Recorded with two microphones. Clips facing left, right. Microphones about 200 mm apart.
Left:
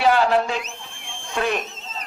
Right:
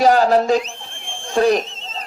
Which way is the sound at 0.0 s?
40° right (ahead or behind).